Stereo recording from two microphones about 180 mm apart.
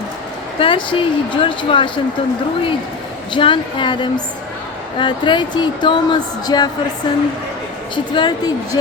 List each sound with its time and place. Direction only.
0.6 s speech: 30° left (ahead or behind)
3.3 s speech: 25° left (ahead or behind)
7.9 s speech: 25° left (ahead or behind)